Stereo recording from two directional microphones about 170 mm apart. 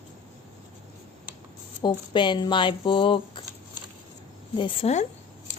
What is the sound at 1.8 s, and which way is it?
Speech, 25° left (ahead or behind).